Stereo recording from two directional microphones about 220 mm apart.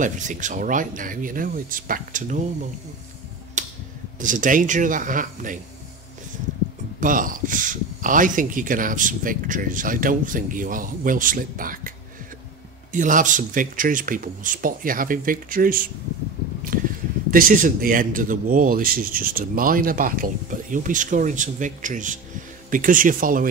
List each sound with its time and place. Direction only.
0.0 s speech: 35° right (ahead or behind)
3.6 s a sound: 35° right (ahead or behind)
4.2 s speech: 35° right (ahead or behind)
7.0 s speech: 40° right (ahead or behind)
12.9 s speech: 35° right (ahead or behind)
16.7 s a sound: 40° right (ahead or behind)
17.3 s speech: 40° right (ahead or behind)